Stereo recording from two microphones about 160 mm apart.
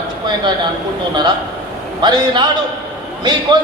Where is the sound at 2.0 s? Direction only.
30° right (ahead or behind).